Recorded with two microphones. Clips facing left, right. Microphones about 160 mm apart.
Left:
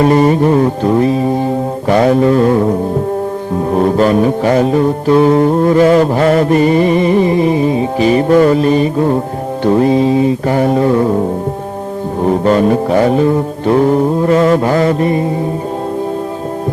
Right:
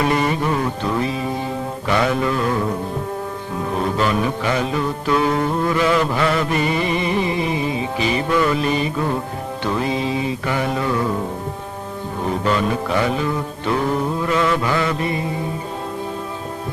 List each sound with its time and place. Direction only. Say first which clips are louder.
0.0 s music: left 10 dB; 40° left (ahead or behind)
12.2 s music: left 9 dB; 40° left (ahead or behind)